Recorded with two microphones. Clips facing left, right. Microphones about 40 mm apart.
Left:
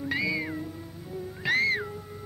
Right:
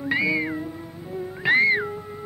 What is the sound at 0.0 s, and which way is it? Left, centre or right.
Music, right.